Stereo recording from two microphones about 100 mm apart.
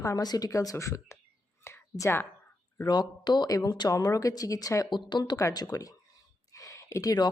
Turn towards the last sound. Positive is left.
turn(degrees=40)  # may be behind; listen again after turning